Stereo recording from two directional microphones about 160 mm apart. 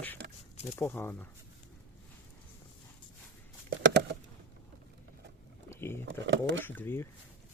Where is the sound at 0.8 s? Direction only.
15° left (ahead or behind).